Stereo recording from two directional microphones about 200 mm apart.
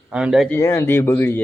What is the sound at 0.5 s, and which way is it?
Speech, 15° left (ahead or behind).